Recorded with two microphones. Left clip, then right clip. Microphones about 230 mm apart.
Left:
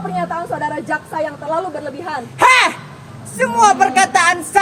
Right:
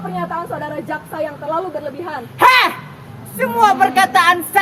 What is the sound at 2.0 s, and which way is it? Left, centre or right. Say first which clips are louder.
A woman's voice: even; left.